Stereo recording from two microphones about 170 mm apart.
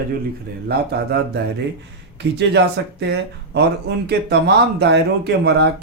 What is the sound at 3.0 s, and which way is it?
Speech, 80° right.